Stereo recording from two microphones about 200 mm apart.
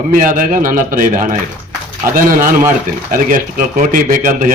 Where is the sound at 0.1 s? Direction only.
40° right (ahead or behind).